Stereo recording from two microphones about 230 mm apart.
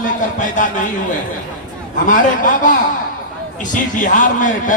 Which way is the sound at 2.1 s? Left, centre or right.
Left.